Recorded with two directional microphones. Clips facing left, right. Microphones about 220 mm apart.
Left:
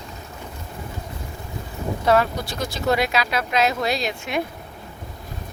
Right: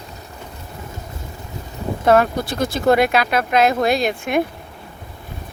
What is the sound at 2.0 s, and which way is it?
Speech, 50° right (ahead or behind).